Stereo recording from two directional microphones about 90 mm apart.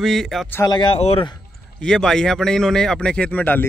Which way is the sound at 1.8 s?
5° left (ahead or behind).